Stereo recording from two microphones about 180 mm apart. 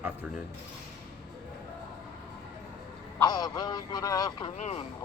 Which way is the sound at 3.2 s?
20° left (ahead or behind).